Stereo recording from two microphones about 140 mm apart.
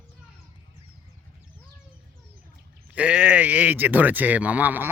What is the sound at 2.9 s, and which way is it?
Speech, 10° right (ahead or behind).